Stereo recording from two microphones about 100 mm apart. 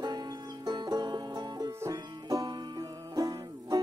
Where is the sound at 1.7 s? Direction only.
25° right (ahead or behind).